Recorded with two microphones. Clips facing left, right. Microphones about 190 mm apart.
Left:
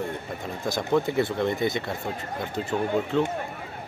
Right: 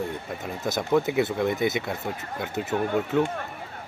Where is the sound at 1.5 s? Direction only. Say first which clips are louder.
Right 1 dB; 20° right (ahead or behind).